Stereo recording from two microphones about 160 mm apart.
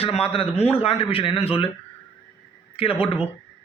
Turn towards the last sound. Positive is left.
turn(degrees=35)  # may be behind; listen again after turning